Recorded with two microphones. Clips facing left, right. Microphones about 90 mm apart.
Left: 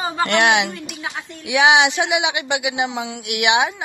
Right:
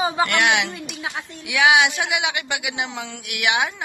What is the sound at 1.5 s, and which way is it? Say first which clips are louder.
A woman's voice: left 2 dB; 20° left (ahead or behind).